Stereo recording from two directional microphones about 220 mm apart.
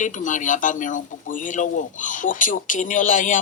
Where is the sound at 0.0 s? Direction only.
35° left (ahead or behind).